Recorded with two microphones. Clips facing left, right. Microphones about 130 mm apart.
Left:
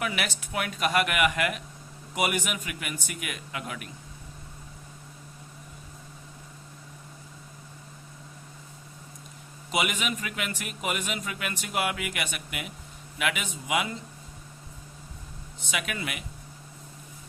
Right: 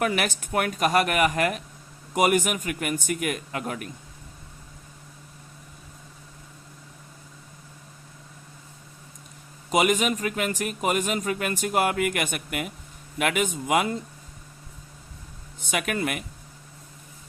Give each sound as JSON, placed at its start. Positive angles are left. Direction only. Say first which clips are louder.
{"t": 0.0, "sound": "a man's voice", "louder": "right 6 dB", "side_deg": -45}
{"t": 9.7, "sound": "a man's voice", "louder": "right 7 dB", "side_deg": -40}
{"t": 15.6, "sound": "a man's voice", "louder": "right 6 dB", "side_deg": -50}